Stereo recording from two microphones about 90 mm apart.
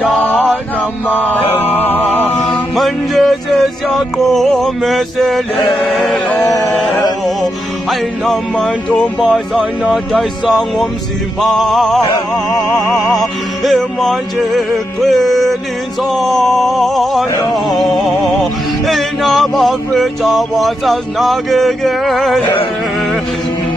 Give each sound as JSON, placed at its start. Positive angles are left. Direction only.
{"t": 1.0, "sound": "music", "side_deg": 15}
{"t": 2.7, "sound": "music", "side_deg": 0}
{"t": 4.3, "sound": "a sound", "side_deg": 0}
{"t": 6.4, "sound": "music", "side_deg": 40}
{"t": 6.7, "sound": "music", "side_deg": 0}
{"t": 8.3, "sound": "a sound", "side_deg": 5}